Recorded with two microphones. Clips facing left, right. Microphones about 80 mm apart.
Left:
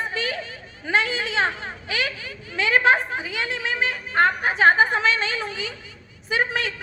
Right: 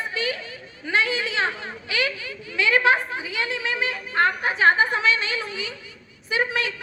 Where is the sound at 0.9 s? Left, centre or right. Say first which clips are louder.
Even; left.